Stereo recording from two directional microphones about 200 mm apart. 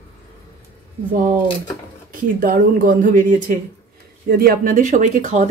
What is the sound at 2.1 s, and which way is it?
A woman's voice, 45° right (ahead or behind).